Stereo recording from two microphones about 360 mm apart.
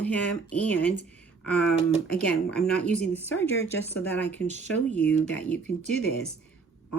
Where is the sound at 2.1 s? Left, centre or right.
Centre.